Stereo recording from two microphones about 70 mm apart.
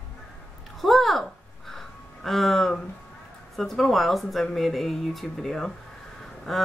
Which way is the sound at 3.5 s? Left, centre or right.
Centre.